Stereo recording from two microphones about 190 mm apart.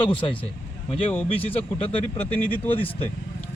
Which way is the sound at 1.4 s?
30° left (ahead or behind).